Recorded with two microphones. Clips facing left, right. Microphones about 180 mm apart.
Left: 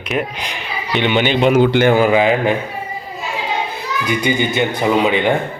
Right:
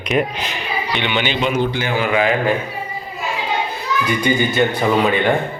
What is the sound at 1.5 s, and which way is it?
Speech, 80° left.